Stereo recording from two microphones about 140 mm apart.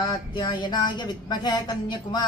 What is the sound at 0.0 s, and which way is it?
Speech, 30° left (ahead or behind).